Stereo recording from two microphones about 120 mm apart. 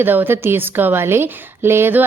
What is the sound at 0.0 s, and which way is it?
A woman's voice, 15° right (ahead or behind).